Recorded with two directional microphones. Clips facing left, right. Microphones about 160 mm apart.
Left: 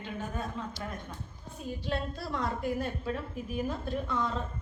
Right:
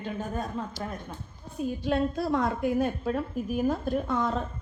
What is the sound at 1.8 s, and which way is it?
A woman's voice, 50° right (ahead or behind).